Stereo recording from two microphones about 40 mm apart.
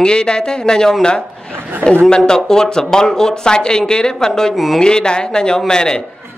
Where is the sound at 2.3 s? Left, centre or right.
Centre.